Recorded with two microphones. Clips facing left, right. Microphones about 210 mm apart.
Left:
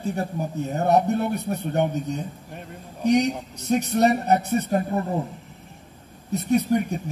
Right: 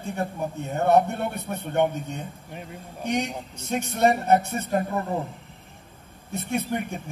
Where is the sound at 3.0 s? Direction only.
40° left (ahead or behind).